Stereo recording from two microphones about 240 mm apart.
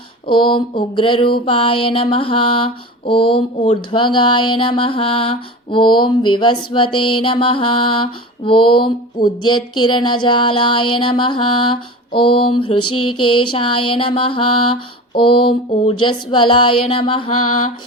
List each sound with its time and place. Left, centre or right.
0.3 s mantra: centre
13.0 s a sound: left
13.4 s mantra: left